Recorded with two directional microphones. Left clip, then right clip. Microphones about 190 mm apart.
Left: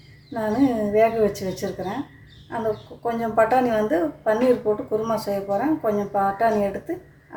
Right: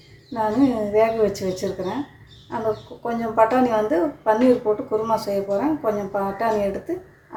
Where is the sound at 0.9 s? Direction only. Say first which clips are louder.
Even; centre (ahead or behind).